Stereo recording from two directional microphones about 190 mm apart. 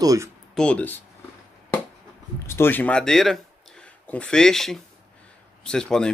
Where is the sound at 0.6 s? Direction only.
5° left (ahead or behind).